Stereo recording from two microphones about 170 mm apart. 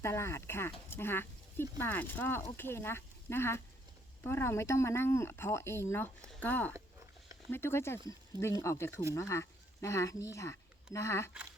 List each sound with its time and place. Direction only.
0.0 s speech: 15° left (ahead or behind)